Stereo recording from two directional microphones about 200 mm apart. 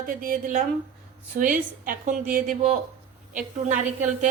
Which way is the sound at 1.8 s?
40° right (ahead or behind).